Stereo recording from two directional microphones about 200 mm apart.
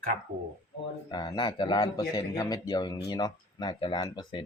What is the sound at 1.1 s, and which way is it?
Speech, 20° left (ahead or behind).